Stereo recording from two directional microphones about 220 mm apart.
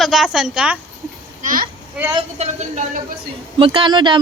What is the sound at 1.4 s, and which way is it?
Speech, 35° right (ahead or behind).